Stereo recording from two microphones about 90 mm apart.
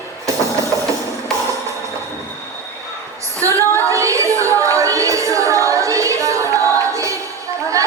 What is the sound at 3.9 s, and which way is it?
Music, 35° right (ahead or behind).